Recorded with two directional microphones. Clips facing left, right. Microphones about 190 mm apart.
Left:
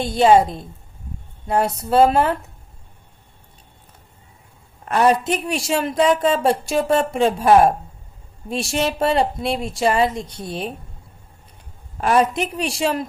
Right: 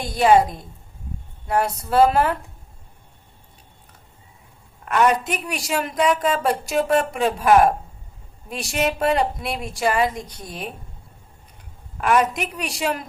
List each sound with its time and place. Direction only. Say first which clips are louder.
0.0 s a woman's voice: left 2 dB; 25° left (ahead or behind)
4.9 s a woman's voice: left 2 dB; 30° left (ahead or behind)
11.9 s a woman's voice: left 2 dB; 30° left (ahead or behind)